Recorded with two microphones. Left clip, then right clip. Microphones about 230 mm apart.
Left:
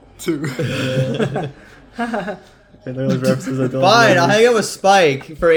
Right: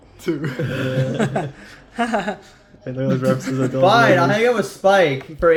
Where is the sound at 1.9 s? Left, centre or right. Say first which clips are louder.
Right 2 dB; right.